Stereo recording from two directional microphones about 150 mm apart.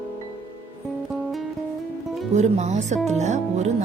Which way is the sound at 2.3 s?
50° right (ahead or behind).